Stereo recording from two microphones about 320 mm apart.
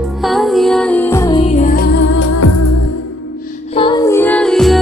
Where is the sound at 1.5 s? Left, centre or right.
Left.